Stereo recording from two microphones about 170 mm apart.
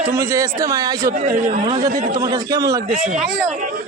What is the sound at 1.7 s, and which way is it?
A man's voice, 25° right (ahead or behind).